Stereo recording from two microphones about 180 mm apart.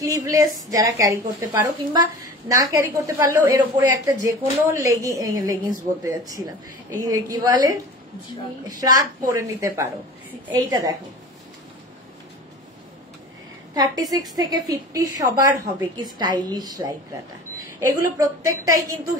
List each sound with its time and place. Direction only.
0.0 s a woman's voice: 20° right (ahead or behind)
14.1 s a woman's voice: 20° right (ahead or behind)
17.6 s a sound: 15° right (ahead or behind)
18.1 s a woman's voice: 20° right (ahead or behind)